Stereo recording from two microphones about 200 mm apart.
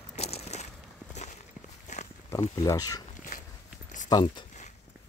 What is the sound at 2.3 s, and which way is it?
Speech, 15° left (ahead or behind).